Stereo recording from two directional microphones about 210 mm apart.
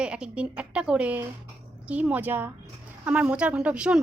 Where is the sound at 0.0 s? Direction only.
5° right (ahead or behind).